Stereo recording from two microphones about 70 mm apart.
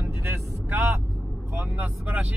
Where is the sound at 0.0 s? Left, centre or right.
Right.